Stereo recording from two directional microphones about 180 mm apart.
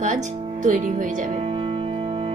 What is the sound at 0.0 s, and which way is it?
Music, 45° right (ahead or behind).